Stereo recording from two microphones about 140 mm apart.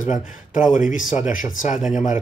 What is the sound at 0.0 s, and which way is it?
Speech, 65° left (ahead or behind).